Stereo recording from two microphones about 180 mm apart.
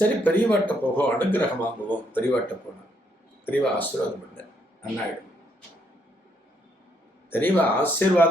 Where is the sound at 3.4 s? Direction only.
10° left (ahead or behind).